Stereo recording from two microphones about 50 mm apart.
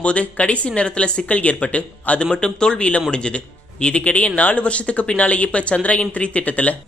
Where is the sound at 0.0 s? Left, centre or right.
Left.